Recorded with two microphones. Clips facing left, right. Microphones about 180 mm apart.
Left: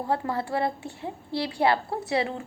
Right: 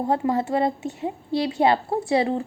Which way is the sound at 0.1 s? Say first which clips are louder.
Right 4 dB; 20° right (ahead or behind).